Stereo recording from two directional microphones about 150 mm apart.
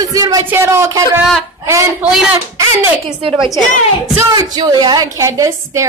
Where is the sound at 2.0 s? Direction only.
Centre (ahead or behind).